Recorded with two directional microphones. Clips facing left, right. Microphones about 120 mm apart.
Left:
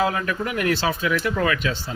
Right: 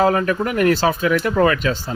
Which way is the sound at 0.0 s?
40° right (ahead or behind).